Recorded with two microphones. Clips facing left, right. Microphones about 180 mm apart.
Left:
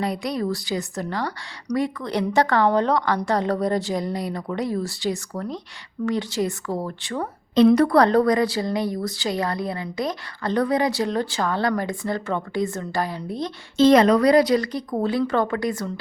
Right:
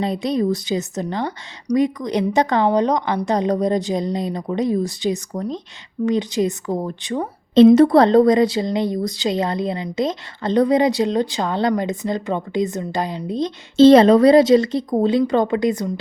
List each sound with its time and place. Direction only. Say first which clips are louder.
0.0 s a woman's voice: right 5 dB; 25° right (ahead or behind)